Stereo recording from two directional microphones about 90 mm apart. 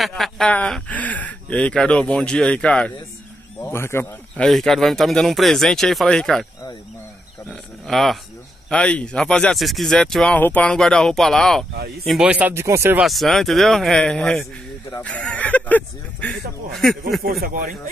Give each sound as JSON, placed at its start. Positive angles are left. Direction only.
{"t": 0.0, "sound": "speech", "side_deg": 5}
{"t": 3.6, "sound": "speech", "side_deg": 25}
{"t": 4.4, "sound": "speech", "side_deg": 5}
{"t": 7.4, "sound": "speech", "side_deg": 5}
{"t": 10.3, "sound": "speech", "side_deg": 15}
{"t": 12.3, "sound": "speech", "side_deg": -15}
{"t": 12.5, "sound": "speech", "side_deg": -30}
{"t": 13.0, "sound": "speech", "side_deg": 0}
{"t": 16.7, "sound": "speech", "side_deg": 0}